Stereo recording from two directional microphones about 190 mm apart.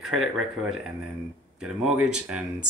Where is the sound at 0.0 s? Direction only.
Centre (ahead or behind).